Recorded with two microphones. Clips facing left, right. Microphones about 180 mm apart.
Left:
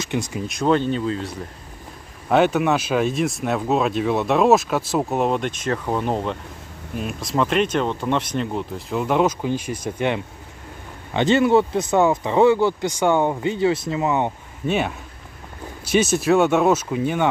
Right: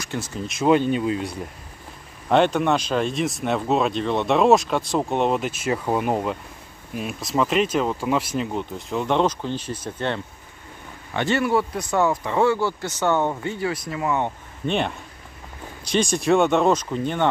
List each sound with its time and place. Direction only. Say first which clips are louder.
0.0 s speech: left 5 dB; 15° left (ahead or behind)
0.5 s speech: right 2 dB; 5° right (ahead or behind)
2.2 s speech: left 1 dB; 5° left (ahead or behind)
14.7 s speech: left 2 dB; 5° left (ahead or behind)